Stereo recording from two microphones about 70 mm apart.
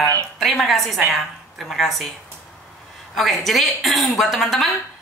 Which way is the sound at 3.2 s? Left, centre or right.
Centre.